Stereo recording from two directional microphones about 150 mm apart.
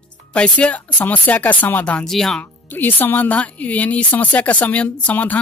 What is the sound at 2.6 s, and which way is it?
Speech, 15° left (ahead or behind).